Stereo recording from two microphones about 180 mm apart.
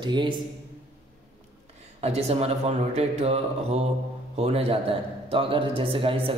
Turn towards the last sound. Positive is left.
turn(degrees=-30)  # may be behind; listen again after turning